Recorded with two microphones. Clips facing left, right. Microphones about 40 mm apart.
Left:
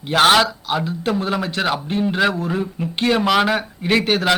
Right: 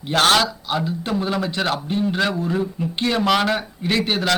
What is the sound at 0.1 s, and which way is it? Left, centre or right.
A man's voice, centre.